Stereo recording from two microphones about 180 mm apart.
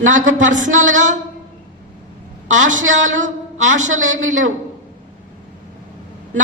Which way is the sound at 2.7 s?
90° right.